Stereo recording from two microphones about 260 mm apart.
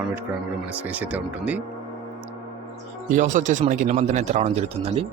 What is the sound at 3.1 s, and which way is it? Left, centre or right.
Speech, right.